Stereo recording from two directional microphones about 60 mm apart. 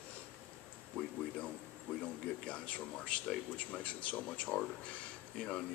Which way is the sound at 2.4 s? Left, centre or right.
Centre.